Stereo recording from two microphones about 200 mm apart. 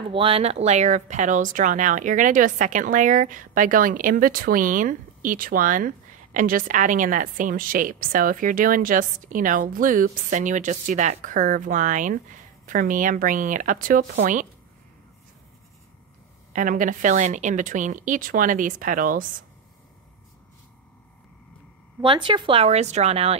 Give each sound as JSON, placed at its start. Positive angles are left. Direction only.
{"t": 0.1, "sound": "speech", "side_deg": -30}
{"t": 16.5, "sound": "speech", "side_deg": -40}
{"t": 22.0, "sound": "speech", "side_deg": -25}